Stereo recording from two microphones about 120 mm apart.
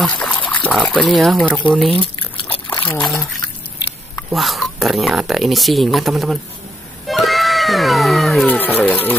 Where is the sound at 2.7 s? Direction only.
15° left (ahead or behind).